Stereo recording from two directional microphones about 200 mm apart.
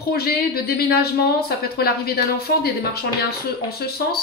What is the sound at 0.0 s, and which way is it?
Speech, 50° left (ahead or behind).